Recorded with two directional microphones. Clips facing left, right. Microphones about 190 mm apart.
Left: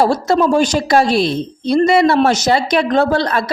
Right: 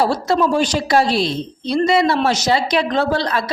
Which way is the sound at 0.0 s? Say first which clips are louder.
Left 3 dB; 45° left (ahead or behind).